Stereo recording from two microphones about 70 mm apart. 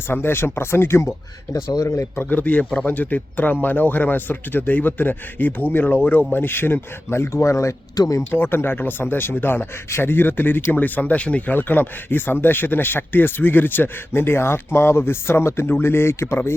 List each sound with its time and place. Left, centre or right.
0.1 s speech: left
1.7 s speech: left
2.3 s a man's voice: left
7.9 s speech: left
8.3 s speech: left